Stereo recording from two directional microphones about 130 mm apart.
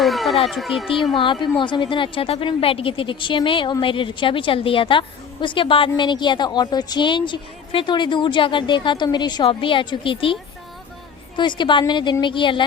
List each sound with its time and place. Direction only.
0.0 s a sound: centre (ahead or behind)
0.4 s speech: centre (ahead or behind)
1.1 s a woman's voice: 40° left (ahead or behind)
11.3 s a woman's voice: 35° left (ahead or behind)